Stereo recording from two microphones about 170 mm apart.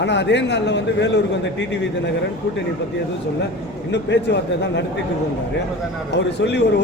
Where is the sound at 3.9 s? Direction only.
85° left.